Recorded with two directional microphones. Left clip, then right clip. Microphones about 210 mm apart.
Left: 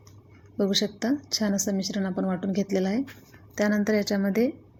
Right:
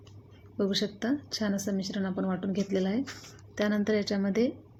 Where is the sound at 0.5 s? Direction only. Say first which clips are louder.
Left 4 dB; 10° left (ahead or behind).